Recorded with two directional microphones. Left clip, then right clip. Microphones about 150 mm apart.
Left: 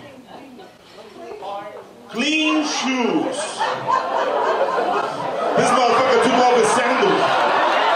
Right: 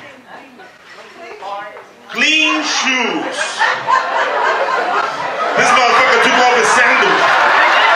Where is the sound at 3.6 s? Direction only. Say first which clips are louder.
Right 7 dB; 25° right (ahead or behind).